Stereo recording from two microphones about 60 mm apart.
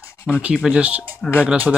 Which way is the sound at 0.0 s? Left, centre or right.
Left.